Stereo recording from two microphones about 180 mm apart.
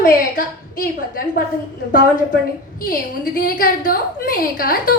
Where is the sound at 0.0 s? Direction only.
50° left (ahead or behind).